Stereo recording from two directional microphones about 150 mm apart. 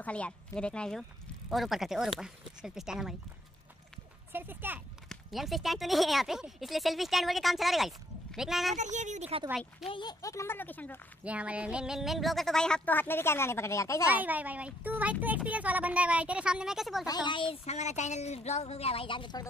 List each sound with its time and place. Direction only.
0.0 s speech: 10° left (ahead or behind)
4.3 s speech: 15° right (ahead or behind)
5.1 s speech: centre (ahead or behind)
8.7 s a woman's voice: 50° right (ahead or behind)
9.8 s speech: 30° left (ahead or behind)
10.2 s speech: 20° left (ahead or behind)
11.2 s speech: 10° right (ahead or behind); by 14.0 s 20° left (ahead or behind)
14.2 s speech: 10° right (ahead or behind)
17.0 s speech: 30° left (ahead or behind)